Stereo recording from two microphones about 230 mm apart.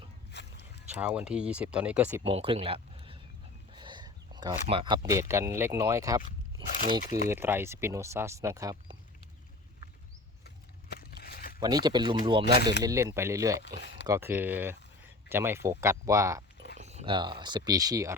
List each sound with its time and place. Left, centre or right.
0.3 s a sound: left
0.9 s speech: centre
2.2 s speech: right
7.3 s speech: centre
10.4 s a sound: left
11.6 s speech: centre
13.6 s speech: left
14.1 s speech: centre
16.7 s speech: right